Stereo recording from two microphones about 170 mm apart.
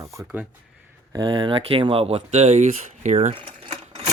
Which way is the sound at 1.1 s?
30° right (ahead or behind).